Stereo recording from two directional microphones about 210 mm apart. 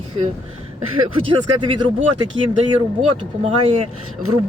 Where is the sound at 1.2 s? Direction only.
25° right (ahead or behind).